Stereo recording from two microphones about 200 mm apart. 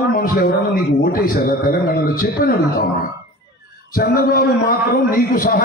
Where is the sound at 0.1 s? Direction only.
45° left (ahead or behind).